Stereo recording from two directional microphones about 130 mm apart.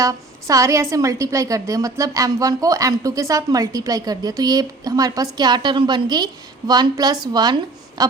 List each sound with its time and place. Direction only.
0.0 s a woman's voice: 25° right (ahead or behind)